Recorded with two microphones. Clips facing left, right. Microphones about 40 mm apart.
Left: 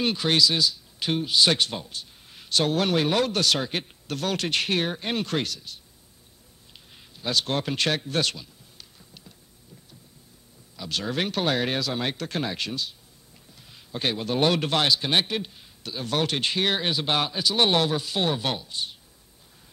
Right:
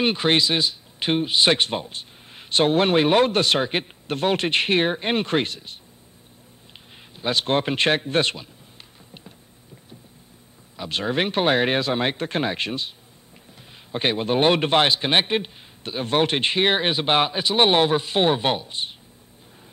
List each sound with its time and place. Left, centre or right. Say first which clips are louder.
0.0 s speech: right 3 dB; right
7.2 s speech: right 5 dB; right
10.8 s speech: right 4 dB; right